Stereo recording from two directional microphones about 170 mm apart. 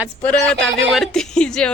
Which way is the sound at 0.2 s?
5° left (ahead or behind).